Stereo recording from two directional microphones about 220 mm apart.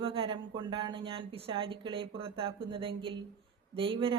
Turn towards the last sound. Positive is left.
turn(degrees=-25)  # may be behind; listen again after turning